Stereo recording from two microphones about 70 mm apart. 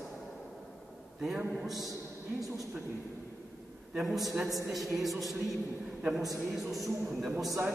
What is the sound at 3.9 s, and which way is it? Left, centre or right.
Speech, centre.